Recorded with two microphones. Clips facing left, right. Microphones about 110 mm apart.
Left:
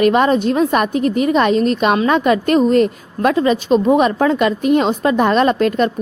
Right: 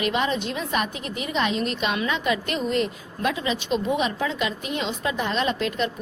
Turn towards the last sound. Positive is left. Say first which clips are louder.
# left 10 dB
turn(degrees=50)  # may be behind; listen again after turning